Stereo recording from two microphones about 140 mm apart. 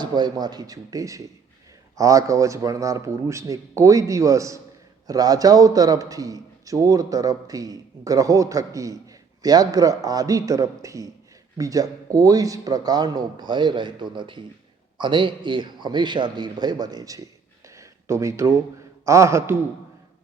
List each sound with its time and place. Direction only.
0.0 s a man's voice: 30° right (ahead or behind)